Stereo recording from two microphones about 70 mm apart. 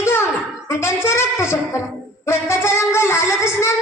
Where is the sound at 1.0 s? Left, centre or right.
Left.